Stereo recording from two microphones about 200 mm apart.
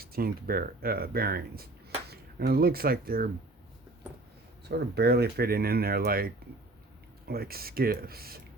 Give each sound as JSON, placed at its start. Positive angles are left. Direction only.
{"t": 0.0, "sound": "speech", "side_deg": -50}
{"t": 4.7, "sound": "speech", "side_deg": -55}